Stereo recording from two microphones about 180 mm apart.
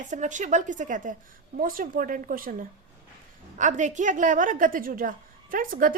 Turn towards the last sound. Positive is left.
turn(degrees=-50)  # may be behind; listen again after turning